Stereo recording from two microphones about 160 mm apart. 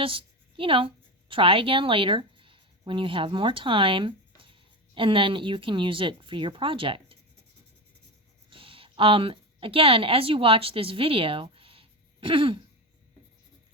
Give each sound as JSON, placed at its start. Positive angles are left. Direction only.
{"t": 0.0, "sound": "a woman's voice", "side_deg": -35}
{"t": 8.4, "sound": "a woman's voice", "side_deg": -35}